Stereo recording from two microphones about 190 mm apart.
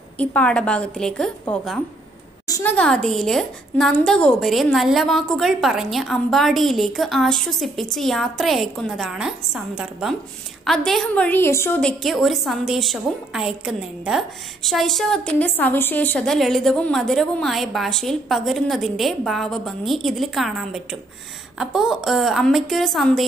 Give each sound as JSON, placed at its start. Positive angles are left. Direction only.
{"t": 0.2, "sound": "a woman's voice", "side_deg": 5}
{"t": 2.4, "sound": "a sound", "side_deg": 20}
{"t": 2.7, "sound": "a woman's voice", "side_deg": 5}